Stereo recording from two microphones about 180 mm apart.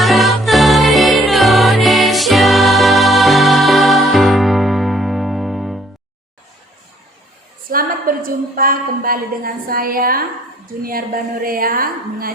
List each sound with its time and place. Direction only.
0.0 s music: centre (ahead or behind)
7.7 s a woman's voice: 50° right (ahead or behind)